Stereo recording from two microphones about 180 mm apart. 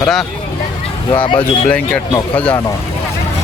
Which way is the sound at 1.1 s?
25° left (ahead or behind).